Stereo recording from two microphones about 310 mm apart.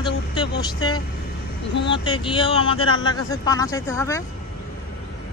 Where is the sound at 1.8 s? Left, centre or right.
Centre.